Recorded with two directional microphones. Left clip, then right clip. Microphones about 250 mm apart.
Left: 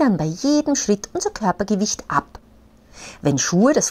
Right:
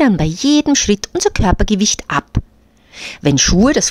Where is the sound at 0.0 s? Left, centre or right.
Right.